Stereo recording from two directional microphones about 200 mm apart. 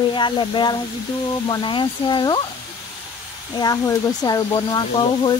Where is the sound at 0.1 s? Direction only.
25° left (ahead or behind).